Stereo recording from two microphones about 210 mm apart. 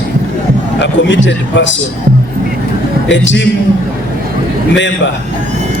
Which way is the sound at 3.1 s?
60° left (ahead or behind).